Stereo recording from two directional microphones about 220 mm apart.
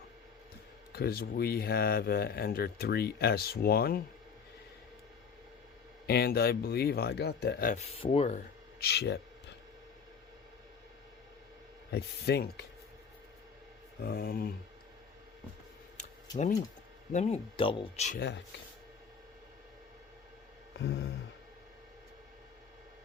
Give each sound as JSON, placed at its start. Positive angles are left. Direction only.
{"t": 0.9, "sound": "speech", "side_deg": 45}
{"t": 6.1, "sound": "speech", "side_deg": 45}
{"t": 8.8, "sound": "speech", "side_deg": 45}
{"t": 11.9, "sound": "speech", "side_deg": 45}
{"t": 14.0, "sound": "speech", "side_deg": 40}
{"t": 17.1, "sound": "speech", "side_deg": 30}
{"t": 18.2, "sound": "speech", "side_deg": 50}
{"t": 20.7, "sound": "speech", "side_deg": 50}